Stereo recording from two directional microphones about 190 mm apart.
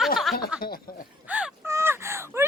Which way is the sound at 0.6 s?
50° left (ahead or behind).